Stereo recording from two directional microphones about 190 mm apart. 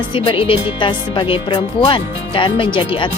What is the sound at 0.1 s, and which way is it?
Music, 25° left (ahead or behind).